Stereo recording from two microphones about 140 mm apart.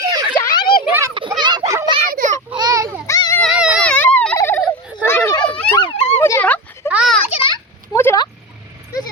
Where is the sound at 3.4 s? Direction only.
5° right (ahead or behind).